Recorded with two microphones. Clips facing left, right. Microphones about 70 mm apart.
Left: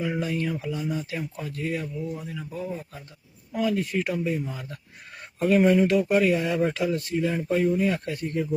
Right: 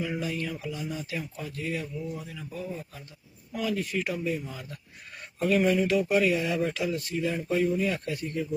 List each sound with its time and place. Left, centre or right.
0.2 s speech: left